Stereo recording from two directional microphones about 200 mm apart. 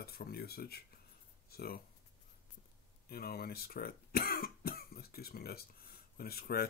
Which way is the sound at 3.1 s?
50° left (ahead or behind).